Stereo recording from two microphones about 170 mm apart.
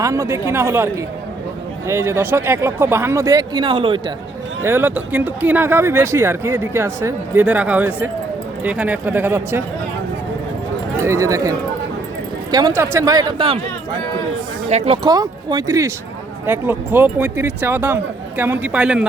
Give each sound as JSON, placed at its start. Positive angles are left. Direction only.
{"t": 0.0, "sound": "speech", "side_deg": -15}
{"t": 1.9, "sound": "speech", "side_deg": -15}
{"t": 4.6, "sound": "speech", "side_deg": -15}
{"t": 11.0, "sound": "speech", "side_deg": -20}
{"t": 14.7, "sound": "speech", "side_deg": -35}
{"t": 15.0, "sound": "speech", "side_deg": -25}